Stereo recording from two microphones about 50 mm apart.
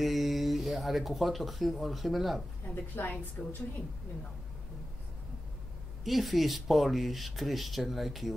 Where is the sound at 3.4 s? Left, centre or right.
Left.